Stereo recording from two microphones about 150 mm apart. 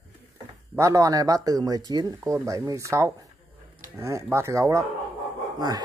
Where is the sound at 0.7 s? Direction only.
20° right (ahead or behind).